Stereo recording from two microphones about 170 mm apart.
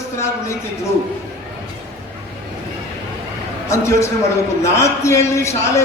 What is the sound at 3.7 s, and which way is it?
A man's voice, 15° left (ahead or behind).